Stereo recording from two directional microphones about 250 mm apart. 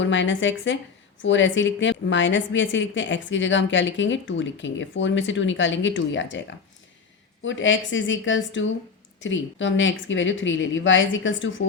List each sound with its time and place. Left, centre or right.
0.0 s a woman's voice: left
7.4 s a woman's voice: left